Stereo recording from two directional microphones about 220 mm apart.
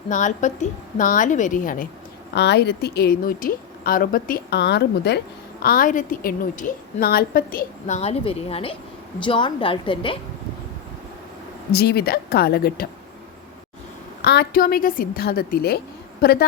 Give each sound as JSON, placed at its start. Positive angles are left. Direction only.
{"t": 0.1, "sound": "a woman's voice", "side_deg": 35}
{"t": 2.3, "sound": "speech", "side_deg": 50}
{"t": 5.6, "sound": "a woman's voice", "side_deg": 40}
{"t": 11.7, "sound": "speech", "side_deg": 45}
{"t": 14.2, "sound": "speech", "side_deg": 45}